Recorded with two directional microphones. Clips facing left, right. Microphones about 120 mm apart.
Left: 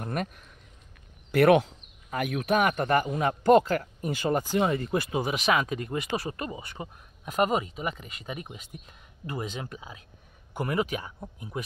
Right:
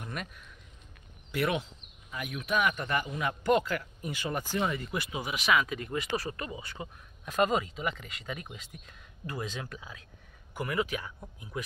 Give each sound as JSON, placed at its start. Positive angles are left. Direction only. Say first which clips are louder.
{"t": 0.0, "sound": "speech", "louder": "left 8 dB", "side_deg": 45}
{"t": 1.3, "sound": "speech", "louder": "left 11 dB", "side_deg": 60}
{"t": 4.3, "sound": "speech", "louder": "left 6 dB", "side_deg": 30}
{"t": 5.9, "sound": "speech", "louder": "left 2 dB", "side_deg": 20}